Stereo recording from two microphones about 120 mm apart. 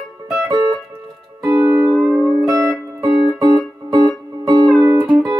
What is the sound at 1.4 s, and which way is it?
Music, 30° right (ahead or behind).